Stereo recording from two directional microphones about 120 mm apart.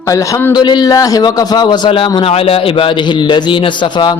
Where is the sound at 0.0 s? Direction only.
25° left (ahead or behind).